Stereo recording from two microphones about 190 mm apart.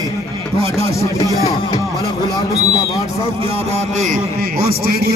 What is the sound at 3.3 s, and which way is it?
A man's voice, 30° right (ahead or behind).